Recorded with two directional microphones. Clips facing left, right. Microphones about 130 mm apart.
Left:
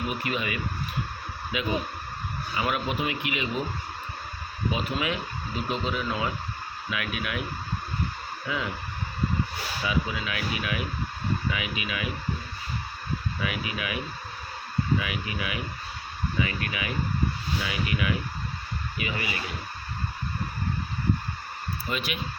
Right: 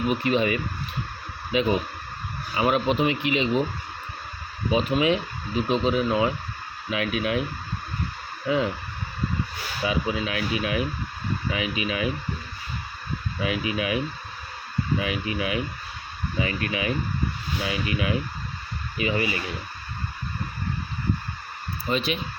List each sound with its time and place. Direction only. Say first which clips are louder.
0.3 s speech: right 7 dB; 30° right (ahead or behind)
4.7 s speech: right 9 dB; 25° right (ahead or behind)
8.4 s speech: right 8 dB; 30° right (ahead or behind)
9.8 s speech: right 4 dB; 30° right (ahead or behind)
13.4 s speech: right 8 dB; 30° right (ahead or behind)
21.8 s speech: right 7 dB; 30° right (ahead or behind)